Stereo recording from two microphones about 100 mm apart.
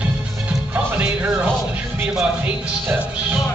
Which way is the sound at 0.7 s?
15° right (ahead or behind).